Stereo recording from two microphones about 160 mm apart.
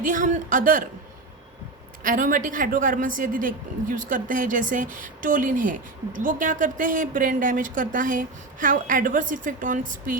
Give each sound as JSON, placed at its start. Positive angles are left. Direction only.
{"t": 0.0, "sound": "a woman's voice", "side_deg": -55}
{"t": 2.0, "sound": "a woman's voice", "side_deg": -55}